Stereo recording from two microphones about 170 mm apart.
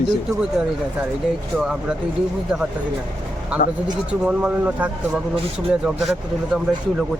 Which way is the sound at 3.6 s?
55° left (ahead or behind).